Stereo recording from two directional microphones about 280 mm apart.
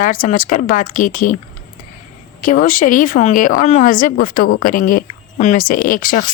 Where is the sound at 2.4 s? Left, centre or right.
Left.